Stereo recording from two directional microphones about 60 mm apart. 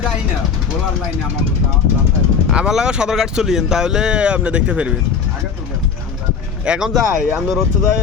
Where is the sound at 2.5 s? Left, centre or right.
Centre.